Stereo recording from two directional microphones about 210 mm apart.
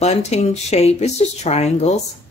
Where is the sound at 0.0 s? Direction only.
30° left (ahead or behind).